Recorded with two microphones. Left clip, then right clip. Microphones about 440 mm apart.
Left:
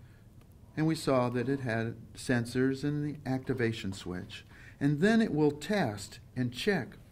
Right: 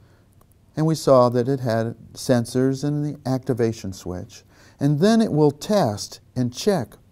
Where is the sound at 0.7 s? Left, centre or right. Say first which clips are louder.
Right 13 dB; right.